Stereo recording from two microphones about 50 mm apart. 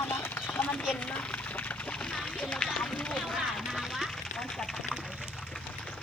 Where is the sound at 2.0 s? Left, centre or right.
Centre.